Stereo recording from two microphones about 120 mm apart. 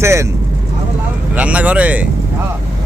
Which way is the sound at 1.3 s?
10° right (ahead or behind).